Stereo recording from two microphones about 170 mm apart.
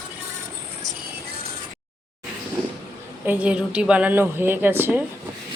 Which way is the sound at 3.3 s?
10° right (ahead or behind).